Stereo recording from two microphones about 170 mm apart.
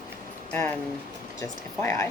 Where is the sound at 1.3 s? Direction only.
15° left (ahead or behind).